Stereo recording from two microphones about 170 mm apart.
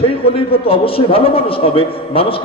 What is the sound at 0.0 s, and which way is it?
A man's voice, 30° left (ahead or behind).